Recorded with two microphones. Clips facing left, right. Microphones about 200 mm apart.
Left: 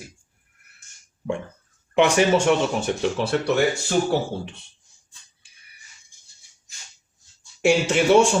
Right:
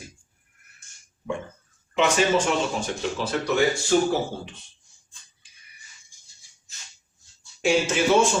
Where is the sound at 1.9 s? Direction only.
65° left (ahead or behind).